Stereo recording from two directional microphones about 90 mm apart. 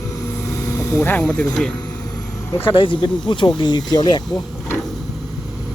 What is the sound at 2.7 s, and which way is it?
Speech, 70° left (ahead or behind).